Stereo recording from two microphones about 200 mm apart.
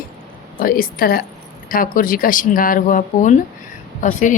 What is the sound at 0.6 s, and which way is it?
Speech, 45° left (ahead or behind).